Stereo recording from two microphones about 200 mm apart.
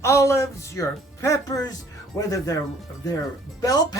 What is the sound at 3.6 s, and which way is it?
Speech, 20° left (ahead or behind).